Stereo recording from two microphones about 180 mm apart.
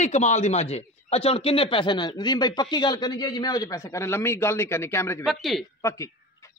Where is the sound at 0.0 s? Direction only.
40° left (ahead or behind); by 5.2 s 15° left (ahead or behind).